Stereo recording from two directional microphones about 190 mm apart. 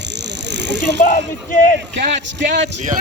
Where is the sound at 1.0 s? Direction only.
45° left (ahead or behind).